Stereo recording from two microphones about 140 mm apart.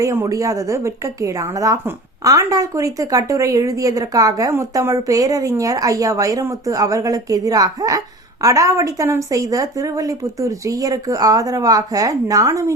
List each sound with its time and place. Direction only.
0.0 s speech: 20° right (ahead or behind)